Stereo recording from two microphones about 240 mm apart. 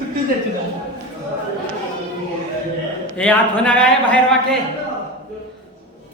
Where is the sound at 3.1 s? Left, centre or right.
Centre.